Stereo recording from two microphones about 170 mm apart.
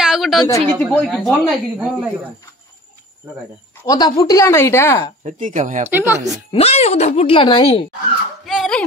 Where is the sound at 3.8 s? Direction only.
25° left (ahead or behind).